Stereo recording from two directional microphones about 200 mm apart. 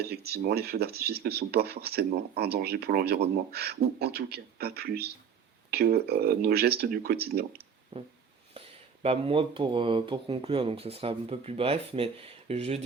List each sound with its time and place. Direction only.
0.1 s speech: 50° right (ahead or behind)
7.9 s speech: 30° right (ahead or behind)